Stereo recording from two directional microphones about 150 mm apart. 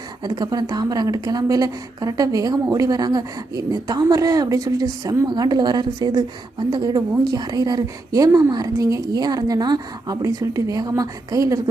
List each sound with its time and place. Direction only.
0.2 s a woman's voice: 25° right (ahead or behind)